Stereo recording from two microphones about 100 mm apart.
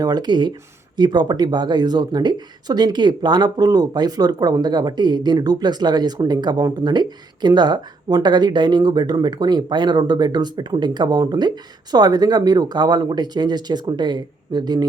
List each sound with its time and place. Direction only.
0.0 s speech: 45° right (ahead or behind)